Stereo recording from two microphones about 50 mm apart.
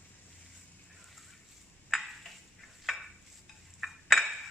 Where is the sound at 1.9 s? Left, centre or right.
Centre.